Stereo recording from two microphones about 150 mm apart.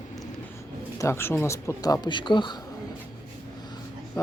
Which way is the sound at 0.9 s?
15° left (ahead or behind).